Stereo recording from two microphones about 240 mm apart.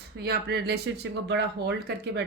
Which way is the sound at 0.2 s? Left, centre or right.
Right.